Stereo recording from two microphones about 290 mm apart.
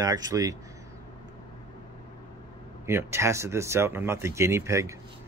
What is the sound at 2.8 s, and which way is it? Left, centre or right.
Speech, centre.